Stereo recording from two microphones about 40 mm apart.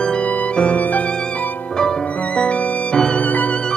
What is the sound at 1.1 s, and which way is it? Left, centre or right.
Violin, left.